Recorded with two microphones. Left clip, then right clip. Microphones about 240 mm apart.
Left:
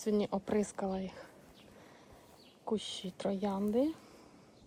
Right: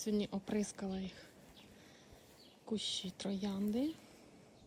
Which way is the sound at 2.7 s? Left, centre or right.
Centre.